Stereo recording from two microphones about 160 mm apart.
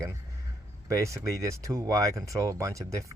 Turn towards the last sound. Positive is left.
turn(degrees=-20)  # may be behind; listen again after turning